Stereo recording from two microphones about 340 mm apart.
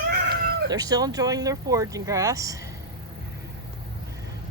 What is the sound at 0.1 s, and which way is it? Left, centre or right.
Cat, right.